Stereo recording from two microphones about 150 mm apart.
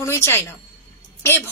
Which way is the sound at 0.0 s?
15° left (ahead or behind).